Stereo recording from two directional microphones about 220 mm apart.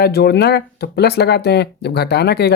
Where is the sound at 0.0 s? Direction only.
45° left (ahead or behind).